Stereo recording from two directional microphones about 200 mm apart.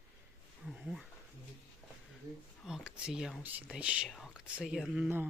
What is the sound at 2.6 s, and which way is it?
Speech, 5° right (ahead or behind).